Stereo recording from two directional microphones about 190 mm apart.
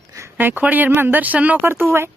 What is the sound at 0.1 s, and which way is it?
Speech, 15° right (ahead or behind).